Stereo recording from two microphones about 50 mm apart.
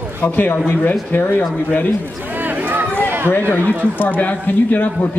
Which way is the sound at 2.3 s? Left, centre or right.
Right.